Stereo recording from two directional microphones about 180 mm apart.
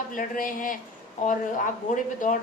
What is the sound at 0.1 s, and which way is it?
Speech, 50° left (ahead or behind).